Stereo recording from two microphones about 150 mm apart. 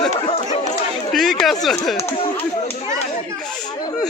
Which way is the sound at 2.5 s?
50° left (ahead or behind).